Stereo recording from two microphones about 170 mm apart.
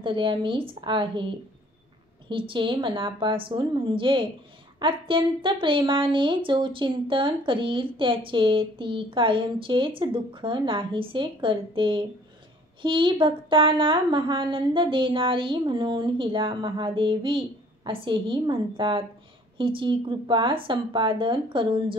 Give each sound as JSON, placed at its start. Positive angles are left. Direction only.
{"t": 0.0, "sound": "speech", "side_deg": -30}